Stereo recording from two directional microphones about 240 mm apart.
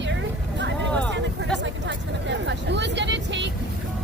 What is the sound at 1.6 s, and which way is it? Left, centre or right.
Vehicle, right.